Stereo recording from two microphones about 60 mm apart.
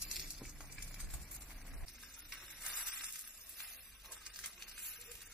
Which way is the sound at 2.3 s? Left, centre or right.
Centre.